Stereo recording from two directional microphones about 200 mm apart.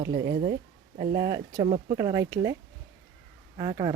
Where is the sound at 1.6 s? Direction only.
30° right (ahead or behind).